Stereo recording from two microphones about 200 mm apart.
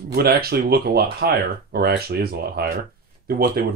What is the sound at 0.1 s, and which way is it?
Speech, 50° right (ahead or behind).